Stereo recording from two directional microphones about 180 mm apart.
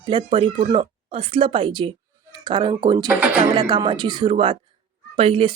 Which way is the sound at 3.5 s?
25° right (ahead or behind).